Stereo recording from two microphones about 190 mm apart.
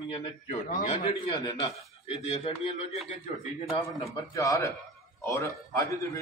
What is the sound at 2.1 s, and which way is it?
Speech, 35° left (ahead or behind).